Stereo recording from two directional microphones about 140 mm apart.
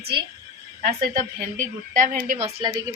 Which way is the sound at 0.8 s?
80° right.